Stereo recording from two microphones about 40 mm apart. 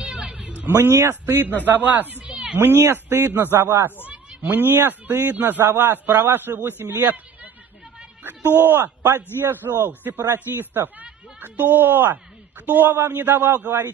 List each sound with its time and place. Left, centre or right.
0.0 s music: right
0.7 s a man's voice: right
1.7 s speech: right
2.7 s a man's voice: right
4.5 s a man's voice: right
8.5 s a man's voice: right
12.9 s a man's voice: right
13.2 s speech: right